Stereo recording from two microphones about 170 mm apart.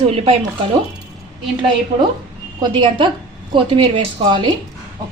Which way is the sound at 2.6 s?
25° right (ahead or behind).